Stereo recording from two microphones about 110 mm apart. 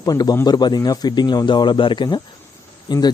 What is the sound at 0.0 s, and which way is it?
Speech, 35° left (ahead or behind).